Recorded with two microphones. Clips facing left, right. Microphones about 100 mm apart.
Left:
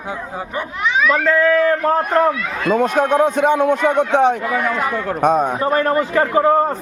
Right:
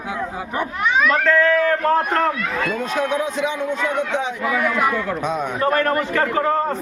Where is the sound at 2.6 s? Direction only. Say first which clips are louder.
Left 9 dB; 55° left (ahead or behind).